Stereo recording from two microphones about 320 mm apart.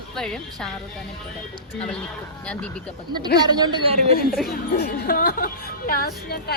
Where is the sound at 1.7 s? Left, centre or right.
Centre.